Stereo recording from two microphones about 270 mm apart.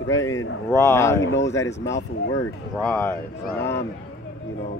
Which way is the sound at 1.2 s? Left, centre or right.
Left.